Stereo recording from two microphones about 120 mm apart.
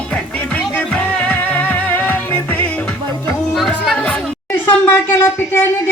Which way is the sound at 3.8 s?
10° left (ahead or behind).